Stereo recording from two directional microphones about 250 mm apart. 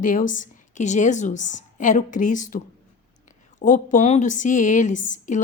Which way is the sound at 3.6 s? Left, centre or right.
Left.